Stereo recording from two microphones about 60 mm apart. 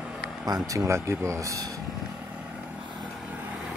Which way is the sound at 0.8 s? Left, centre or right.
Right.